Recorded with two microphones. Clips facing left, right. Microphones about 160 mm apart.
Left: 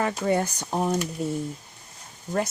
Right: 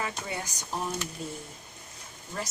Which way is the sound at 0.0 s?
50° left (ahead or behind).